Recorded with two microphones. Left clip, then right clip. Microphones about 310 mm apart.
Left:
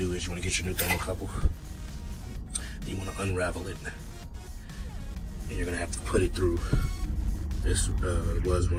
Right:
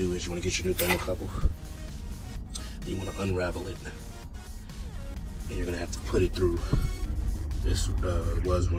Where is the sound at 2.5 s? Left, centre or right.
Centre.